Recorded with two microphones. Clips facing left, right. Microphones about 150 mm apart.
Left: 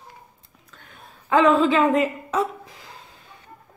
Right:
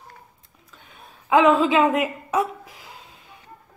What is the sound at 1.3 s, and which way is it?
A woman's voice, 5° right (ahead or behind).